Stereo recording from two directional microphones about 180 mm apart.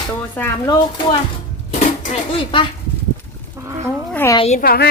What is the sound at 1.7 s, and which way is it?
Dishes, 45° left (ahead or behind).